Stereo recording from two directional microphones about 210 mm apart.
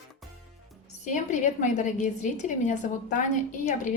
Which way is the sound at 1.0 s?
35° left (ahead or behind).